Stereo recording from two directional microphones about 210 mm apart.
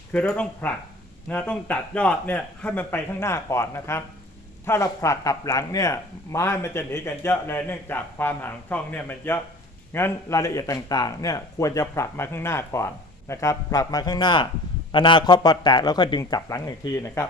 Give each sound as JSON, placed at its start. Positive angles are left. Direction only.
{"t": 0.1, "sound": "speech", "side_deg": 5}